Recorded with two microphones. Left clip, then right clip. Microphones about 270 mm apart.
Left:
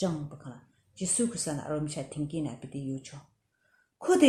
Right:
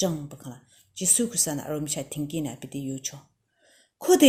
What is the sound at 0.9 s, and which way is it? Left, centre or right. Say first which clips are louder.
A woman's voice: right 6 dB; right.